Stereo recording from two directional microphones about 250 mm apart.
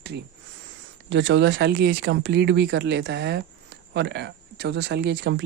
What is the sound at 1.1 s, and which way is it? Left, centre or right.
Speech, right.